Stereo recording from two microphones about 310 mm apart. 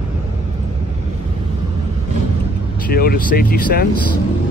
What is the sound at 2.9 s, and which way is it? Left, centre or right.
Speech, left.